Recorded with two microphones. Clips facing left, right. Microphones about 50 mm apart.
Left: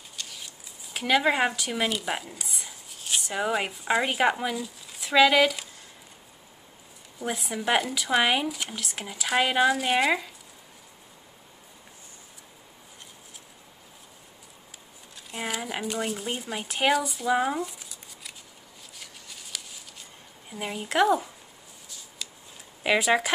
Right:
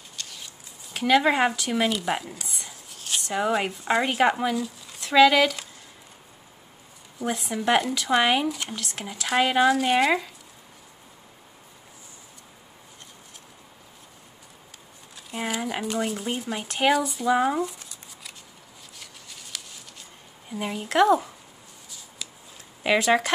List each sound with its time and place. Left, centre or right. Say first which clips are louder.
0.1 s a sound: even; centre
0.9 s speech: right 3 dB; centre
7.2 s speech: right 3 dB; centre
15.1 s speech: right 3 dB; centre
18.9 s a sound: even; centre
22.8 s speech: right 2 dB; centre